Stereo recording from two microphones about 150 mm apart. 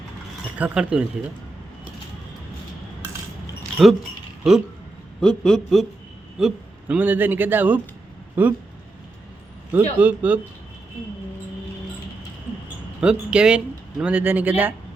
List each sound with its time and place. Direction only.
0.6 s a man's voice: 5° right (ahead or behind)
3.8 s a man's voice: 5° right (ahead or behind)
6.4 s a man's voice: 10° right (ahead or behind)
9.7 s a man's voice: 10° right (ahead or behind)
12.6 s a sound: 5° right (ahead or behind)
14.0 s a man's voice: 10° right (ahead or behind)